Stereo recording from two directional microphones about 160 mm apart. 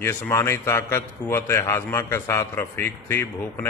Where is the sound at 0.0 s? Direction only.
15° left (ahead or behind).